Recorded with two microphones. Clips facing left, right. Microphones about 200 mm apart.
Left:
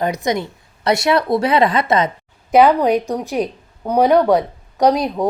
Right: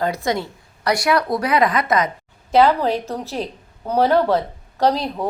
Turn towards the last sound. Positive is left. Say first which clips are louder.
# left 4 dB
turn(degrees=15)  # may be behind; listen again after turning